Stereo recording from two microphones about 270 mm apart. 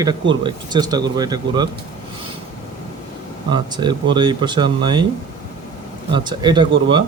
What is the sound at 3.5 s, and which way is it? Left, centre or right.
Speech, centre.